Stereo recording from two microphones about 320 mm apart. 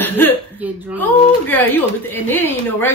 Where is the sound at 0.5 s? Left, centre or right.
Centre.